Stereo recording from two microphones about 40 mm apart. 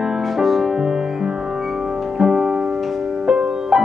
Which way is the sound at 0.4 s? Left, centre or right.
Centre.